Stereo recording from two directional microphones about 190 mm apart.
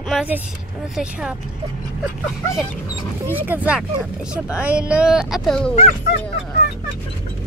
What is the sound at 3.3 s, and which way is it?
Speech, 10° right (ahead or behind).